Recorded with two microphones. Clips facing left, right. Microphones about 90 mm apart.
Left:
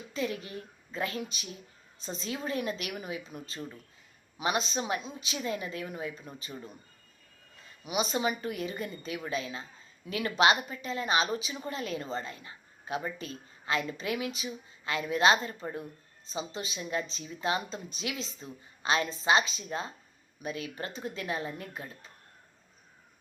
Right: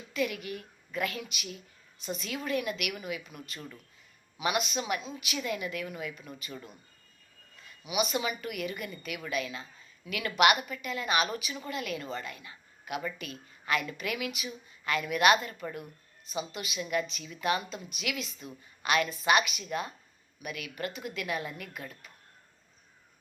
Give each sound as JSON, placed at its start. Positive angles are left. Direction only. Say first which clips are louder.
{"t": 0.1, "sound": "a child's voice", "louder": "right 2 dB", "side_deg": 30}
{"t": 7.9, "sound": "a woman's voice", "louder": "left 1 dB", "side_deg": 30}